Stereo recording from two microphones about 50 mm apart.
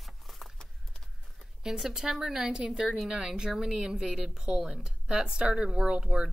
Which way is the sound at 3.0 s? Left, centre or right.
Centre.